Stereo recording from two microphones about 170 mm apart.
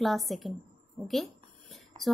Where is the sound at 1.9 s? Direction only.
25° right (ahead or behind).